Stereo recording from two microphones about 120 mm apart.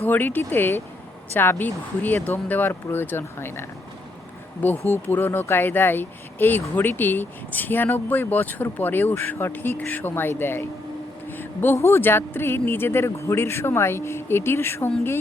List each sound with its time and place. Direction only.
0.0 s speech: 15° left (ahead or behind)